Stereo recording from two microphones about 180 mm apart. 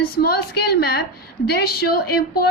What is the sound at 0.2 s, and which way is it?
A woman's voice, 60° left (ahead or behind).